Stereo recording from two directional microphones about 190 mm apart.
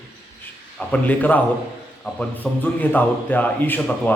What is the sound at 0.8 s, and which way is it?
Speech, 5° left (ahead or behind).